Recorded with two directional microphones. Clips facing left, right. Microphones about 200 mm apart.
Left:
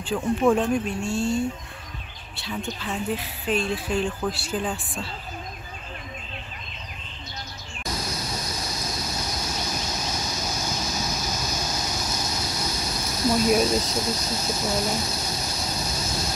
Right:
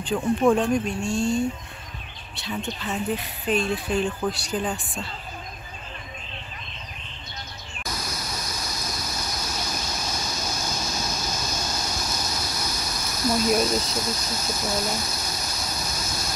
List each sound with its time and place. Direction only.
0.0 s a woman's voice: centre (ahead or behind)
2.4 s a woman's voice: centre (ahead or behind)
7.8 s a sound: 30° left (ahead or behind)
10.5 s vehicle: 15° left (ahead or behind)
11.1 s waves: 5° left (ahead or behind)
12.3 s a sound: 25° left (ahead or behind)
13.5 s speech: 10° left (ahead or behind)
13.7 s speech: 25° left (ahead or behind)
15.0 s a sound: 30° left (ahead or behind)